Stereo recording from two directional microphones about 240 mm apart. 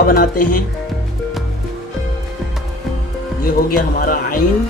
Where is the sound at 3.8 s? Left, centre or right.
Left.